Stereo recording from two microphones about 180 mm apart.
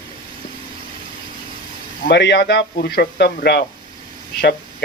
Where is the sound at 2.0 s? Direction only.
70° left (ahead or behind).